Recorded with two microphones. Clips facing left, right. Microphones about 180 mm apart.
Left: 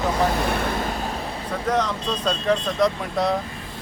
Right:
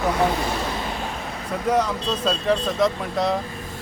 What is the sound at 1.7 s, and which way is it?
Speech, 10° right (ahead or behind).